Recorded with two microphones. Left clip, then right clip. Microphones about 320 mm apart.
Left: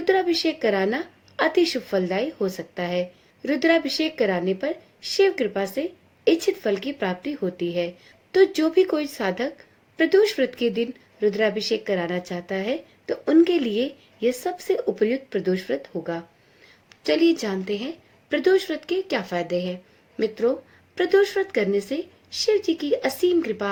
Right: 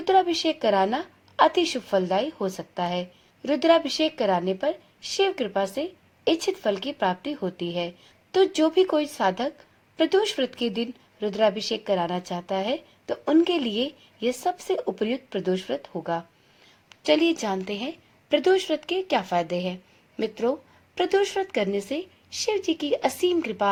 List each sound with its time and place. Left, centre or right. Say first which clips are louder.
0.0 s a woman's voice: even; centre